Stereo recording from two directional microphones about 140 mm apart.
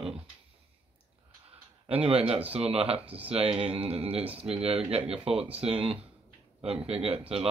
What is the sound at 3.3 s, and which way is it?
Speech, 40° right (ahead or behind).